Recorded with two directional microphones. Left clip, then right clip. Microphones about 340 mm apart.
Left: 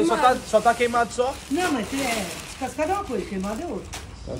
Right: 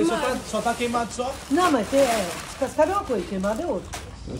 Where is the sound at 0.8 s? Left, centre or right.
Centre.